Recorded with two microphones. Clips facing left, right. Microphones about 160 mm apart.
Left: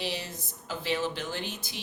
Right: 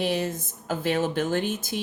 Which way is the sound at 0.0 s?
50° right (ahead or behind).